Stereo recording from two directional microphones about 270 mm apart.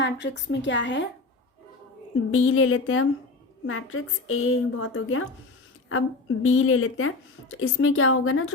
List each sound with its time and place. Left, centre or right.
0.0 s a woman's voice: left
2.3 s a woman's voice: left